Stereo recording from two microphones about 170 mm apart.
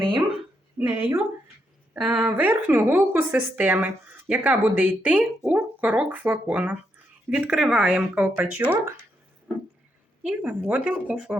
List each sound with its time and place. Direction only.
0.0 s speech: 30° right (ahead or behind)
0.8 s a woman's voice: 15° right (ahead or behind)
2.0 s a woman's voice: 5° right (ahead or behind)
10.2 s a woman's voice: 5° right (ahead or behind)